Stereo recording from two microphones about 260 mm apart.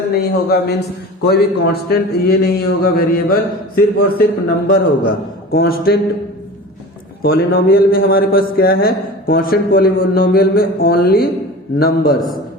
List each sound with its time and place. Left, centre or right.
0.1 s a man's voice: left
7.2 s a man's voice: left